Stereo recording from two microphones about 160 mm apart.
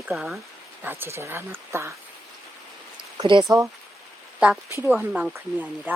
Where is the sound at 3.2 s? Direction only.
30° right (ahead or behind).